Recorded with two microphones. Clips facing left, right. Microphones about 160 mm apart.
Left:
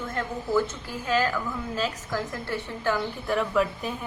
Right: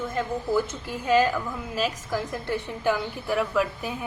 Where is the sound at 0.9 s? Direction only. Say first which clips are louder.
Right 7 dB; 20° right (ahead or behind).